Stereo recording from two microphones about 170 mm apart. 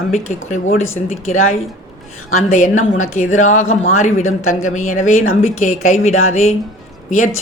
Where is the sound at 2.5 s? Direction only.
45° left (ahead or behind).